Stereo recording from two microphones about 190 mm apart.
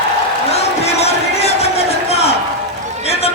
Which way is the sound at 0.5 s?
35° left (ahead or behind).